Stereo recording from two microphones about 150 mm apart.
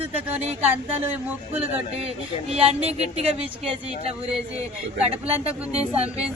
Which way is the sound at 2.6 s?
40° right (ahead or behind).